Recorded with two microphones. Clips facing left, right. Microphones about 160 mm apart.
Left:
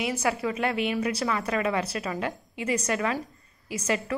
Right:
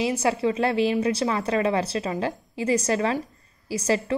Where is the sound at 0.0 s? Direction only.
25° right (ahead or behind).